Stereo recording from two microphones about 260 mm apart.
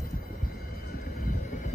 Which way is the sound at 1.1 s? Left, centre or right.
Left.